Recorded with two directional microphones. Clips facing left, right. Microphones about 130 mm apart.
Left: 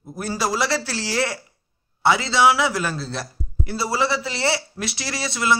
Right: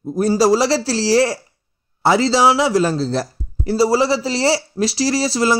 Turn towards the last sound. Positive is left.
turn(degrees=-35)  # may be behind; listen again after turning